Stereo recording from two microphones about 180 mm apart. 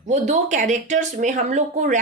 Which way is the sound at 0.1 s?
40° right (ahead or behind).